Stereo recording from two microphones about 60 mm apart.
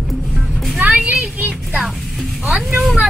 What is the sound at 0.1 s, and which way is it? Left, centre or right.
Music, centre.